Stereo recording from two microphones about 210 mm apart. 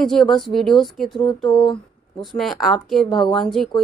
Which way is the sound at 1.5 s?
20° left (ahead or behind).